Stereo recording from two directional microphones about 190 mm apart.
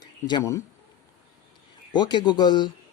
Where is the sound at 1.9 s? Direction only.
25° left (ahead or behind).